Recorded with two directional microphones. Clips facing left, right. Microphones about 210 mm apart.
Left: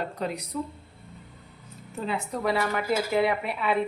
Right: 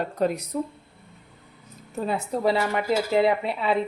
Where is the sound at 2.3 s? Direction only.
25° right (ahead or behind).